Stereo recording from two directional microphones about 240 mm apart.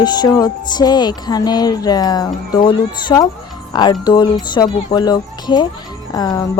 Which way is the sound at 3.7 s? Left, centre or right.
Centre.